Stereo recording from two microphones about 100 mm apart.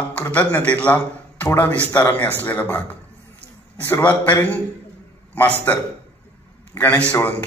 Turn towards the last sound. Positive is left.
turn(degrees=20)  # may be behind; listen again after turning